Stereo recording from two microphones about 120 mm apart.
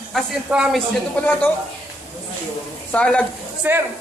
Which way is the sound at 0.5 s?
5° right (ahead or behind).